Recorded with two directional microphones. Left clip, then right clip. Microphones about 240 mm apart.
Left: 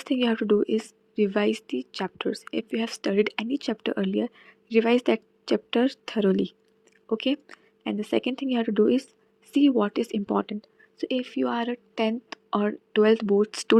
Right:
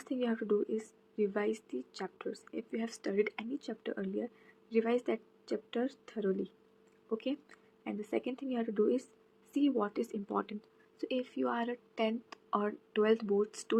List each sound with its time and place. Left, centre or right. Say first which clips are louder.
0.0 s speech: left 10 dB; left